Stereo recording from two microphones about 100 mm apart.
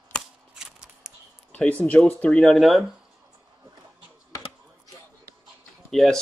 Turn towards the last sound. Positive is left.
turn(degrees=0)  # may be behind; listen again after turning